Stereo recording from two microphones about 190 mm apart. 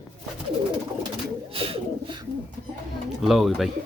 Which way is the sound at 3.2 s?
Centre (ahead or behind).